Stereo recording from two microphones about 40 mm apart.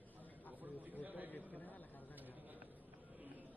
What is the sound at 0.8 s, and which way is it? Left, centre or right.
Speech, right.